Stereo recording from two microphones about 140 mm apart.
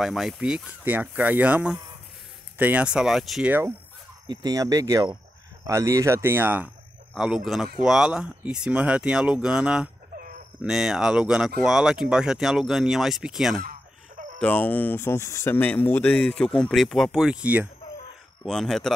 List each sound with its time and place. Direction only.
0.0 s speech: 5° right (ahead or behind)
4.3 s speech: 30° right (ahead or behind); by 13.6 s 5° right (ahead or behind)
14.4 s speech: 10° left (ahead or behind); by 17.6 s 10° right (ahead or behind)
18.4 s speech: centre (ahead or behind)